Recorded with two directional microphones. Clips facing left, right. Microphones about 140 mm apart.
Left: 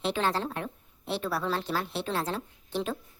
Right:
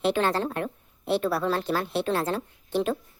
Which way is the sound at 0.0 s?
55° right (ahead or behind).